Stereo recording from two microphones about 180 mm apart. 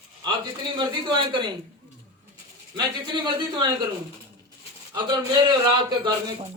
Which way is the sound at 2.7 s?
25° right (ahead or behind).